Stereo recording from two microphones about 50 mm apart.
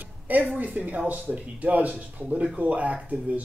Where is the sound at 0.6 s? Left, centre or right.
Right.